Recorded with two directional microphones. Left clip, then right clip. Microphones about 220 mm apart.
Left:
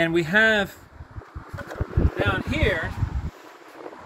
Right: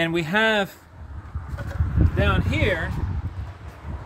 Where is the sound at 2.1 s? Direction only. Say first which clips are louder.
Right 1 dB; 60° right (ahead or behind).